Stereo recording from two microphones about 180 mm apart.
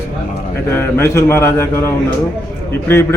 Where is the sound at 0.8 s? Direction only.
15° left (ahead or behind).